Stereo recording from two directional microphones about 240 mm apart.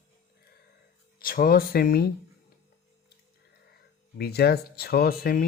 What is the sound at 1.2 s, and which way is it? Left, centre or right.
Speech, left.